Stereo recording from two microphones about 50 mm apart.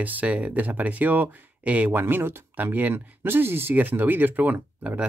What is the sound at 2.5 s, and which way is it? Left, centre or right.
Speech, right.